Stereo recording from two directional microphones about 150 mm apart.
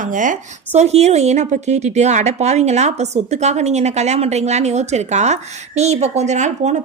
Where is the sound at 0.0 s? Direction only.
60° right (ahead or behind).